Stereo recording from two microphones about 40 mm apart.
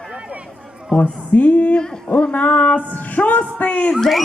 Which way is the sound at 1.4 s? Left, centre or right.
Left.